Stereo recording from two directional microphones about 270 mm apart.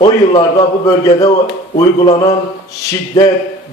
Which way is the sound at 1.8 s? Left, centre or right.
Centre.